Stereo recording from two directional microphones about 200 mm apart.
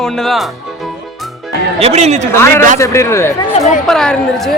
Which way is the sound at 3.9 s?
Centre (ahead or behind).